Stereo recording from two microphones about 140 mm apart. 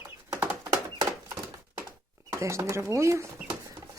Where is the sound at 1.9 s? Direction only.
20° right (ahead or behind).